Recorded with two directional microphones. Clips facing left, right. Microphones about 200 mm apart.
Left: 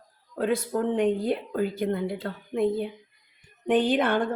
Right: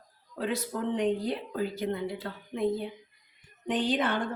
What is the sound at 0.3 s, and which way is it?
Speech, 50° left (ahead or behind).